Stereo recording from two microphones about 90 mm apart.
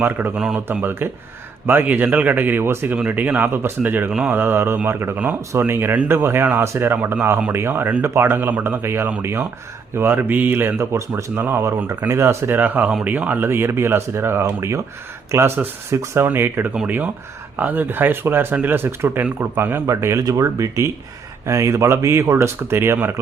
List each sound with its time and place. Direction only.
0.0 s speech: 20° right (ahead or behind)
0.3 s speech: 10° right (ahead or behind)